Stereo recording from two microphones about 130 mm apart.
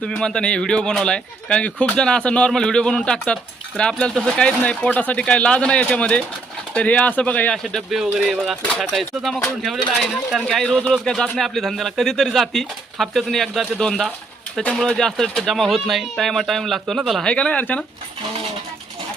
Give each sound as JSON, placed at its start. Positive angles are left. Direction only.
{"t": 0.0, "sound": "speech", "side_deg": 5}